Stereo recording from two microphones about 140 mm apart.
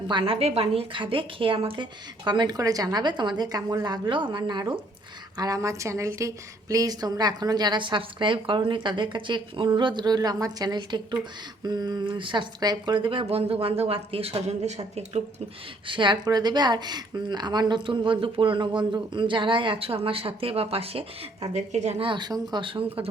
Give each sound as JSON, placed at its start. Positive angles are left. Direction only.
{"t": 0.1, "sound": "a woman's voice", "side_deg": -40}
{"t": 15.9, "sound": "a woman's voice", "side_deg": -35}
{"t": 21.5, "sound": "a woman's voice", "side_deg": -55}